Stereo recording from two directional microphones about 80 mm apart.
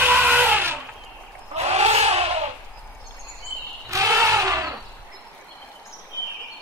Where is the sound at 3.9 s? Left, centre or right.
Right.